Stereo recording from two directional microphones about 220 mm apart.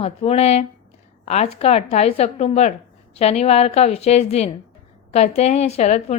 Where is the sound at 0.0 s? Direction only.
30° left (ahead or behind).